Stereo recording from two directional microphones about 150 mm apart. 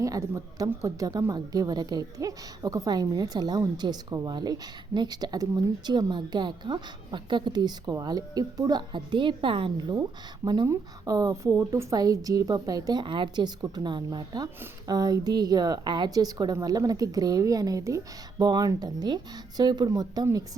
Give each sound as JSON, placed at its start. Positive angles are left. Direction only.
{"t": 0.0, "sound": "speech", "side_deg": -20}